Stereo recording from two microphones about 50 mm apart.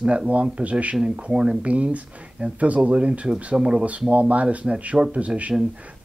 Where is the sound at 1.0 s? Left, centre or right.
Centre.